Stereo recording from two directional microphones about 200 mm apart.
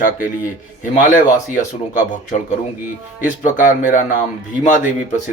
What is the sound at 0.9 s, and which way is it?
A man's voice, 40° left (ahead or behind).